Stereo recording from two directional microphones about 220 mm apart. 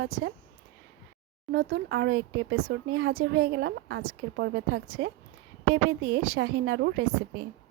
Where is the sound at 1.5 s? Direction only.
50° right (ahead or behind).